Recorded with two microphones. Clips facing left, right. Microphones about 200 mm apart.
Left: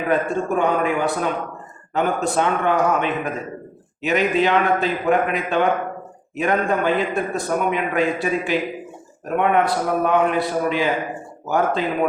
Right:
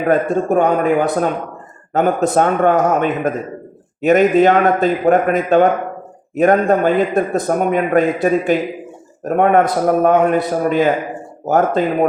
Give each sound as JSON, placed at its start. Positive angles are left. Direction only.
{"t": 0.0, "sound": "a man's voice", "side_deg": -45}